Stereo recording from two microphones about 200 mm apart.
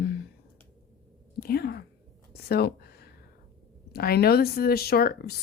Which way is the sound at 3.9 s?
50° left (ahead or behind).